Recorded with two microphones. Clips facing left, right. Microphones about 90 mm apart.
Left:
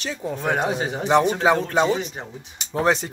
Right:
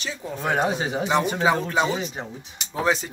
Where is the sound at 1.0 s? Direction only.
55° left (ahead or behind).